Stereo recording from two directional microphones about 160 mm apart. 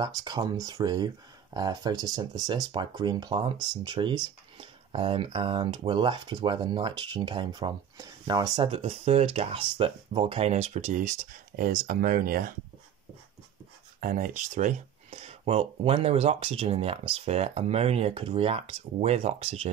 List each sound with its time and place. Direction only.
0.0 s speech: 25° right (ahead or behind); by 12.5 s 60° right (ahead or behind)
13.9 s speech: 60° right (ahead or behind)
15.0 s speech: 40° right (ahead or behind)